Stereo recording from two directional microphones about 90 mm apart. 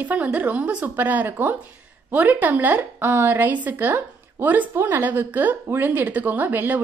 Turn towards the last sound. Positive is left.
turn(degrees=-20)  # may be behind; listen again after turning